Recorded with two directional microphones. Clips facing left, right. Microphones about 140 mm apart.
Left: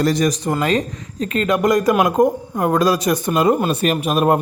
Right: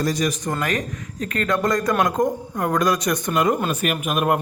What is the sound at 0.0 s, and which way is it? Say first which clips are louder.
Speech: left 5 dB; 65° left (ahead or behind).